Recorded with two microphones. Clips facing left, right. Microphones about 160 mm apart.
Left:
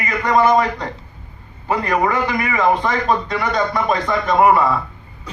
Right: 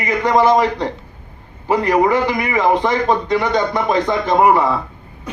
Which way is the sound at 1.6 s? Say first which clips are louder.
Right 4 dB; 15° right (ahead or behind).